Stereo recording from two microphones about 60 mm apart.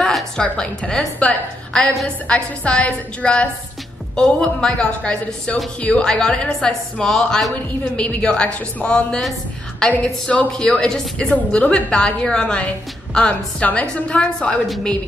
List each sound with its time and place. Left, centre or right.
0.0 s a woman's voice: centre